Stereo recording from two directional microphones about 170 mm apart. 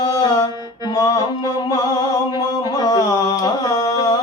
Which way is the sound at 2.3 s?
25° left (ahead or behind).